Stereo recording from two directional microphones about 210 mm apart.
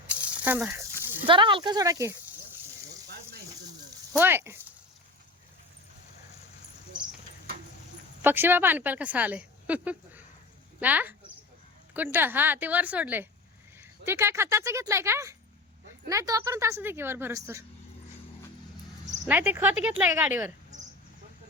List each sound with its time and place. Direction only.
0.1 s rattle: 5° right (ahead or behind)
1.3 s speech: 25° right (ahead or behind)
4.1 s speech: 10° right (ahead or behind)
8.2 s speech: 10° right (ahead or behind)
19.2 s speech: 10° right (ahead or behind)
20.7 s cricket: 35° right (ahead or behind)